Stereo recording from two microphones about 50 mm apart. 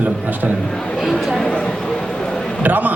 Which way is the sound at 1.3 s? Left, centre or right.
Centre.